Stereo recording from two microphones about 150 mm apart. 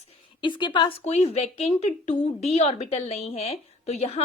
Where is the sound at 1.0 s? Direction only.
50° left (ahead or behind).